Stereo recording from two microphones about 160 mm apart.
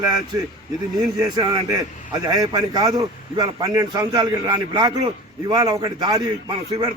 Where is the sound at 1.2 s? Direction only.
25° right (ahead or behind).